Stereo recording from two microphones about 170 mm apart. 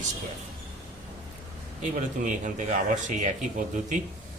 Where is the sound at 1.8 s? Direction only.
45° right (ahead or behind).